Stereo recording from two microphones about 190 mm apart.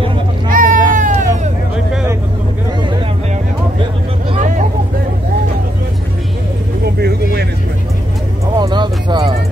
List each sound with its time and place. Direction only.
0.5 s a sound: 45° right (ahead or behind)
4.4 s vehicle: 40° right (ahead or behind)
6.8 s vehicle: 55° right (ahead or behind)
8.5 s music: 25° right (ahead or behind)